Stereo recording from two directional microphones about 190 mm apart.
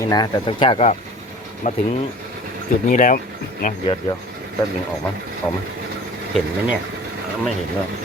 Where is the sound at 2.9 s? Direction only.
45° left (ahead or behind).